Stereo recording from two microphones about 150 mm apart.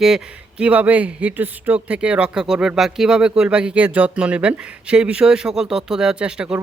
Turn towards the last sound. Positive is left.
turn(degrees=-5)  # may be behind; listen again after turning